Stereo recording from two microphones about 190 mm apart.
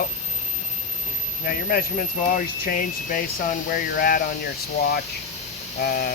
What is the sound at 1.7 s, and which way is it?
Speech, 45° left (ahead or behind).